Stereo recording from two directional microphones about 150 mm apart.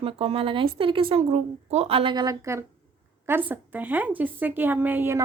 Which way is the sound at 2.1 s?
25° right (ahead or behind).